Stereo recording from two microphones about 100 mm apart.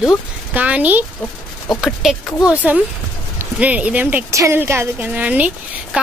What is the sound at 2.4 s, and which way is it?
A woman's voice, 15° right (ahead or behind).